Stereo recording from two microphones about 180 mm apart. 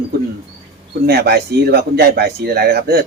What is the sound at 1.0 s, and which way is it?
Speech, 65° right (ahead or behind).